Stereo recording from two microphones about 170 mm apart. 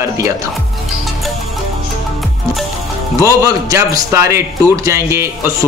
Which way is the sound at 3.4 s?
20° right (ahead or behind).